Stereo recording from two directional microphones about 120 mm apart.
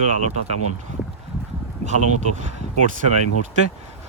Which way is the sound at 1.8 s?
75° right (ahead or behind).